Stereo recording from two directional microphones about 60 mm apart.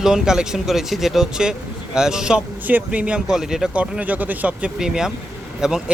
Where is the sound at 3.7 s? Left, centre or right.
Right.